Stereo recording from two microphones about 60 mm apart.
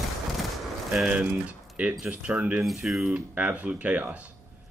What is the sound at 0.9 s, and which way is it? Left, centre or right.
Speech, centre.